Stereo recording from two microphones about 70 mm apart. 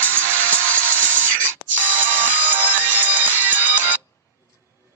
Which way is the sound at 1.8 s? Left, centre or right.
Right.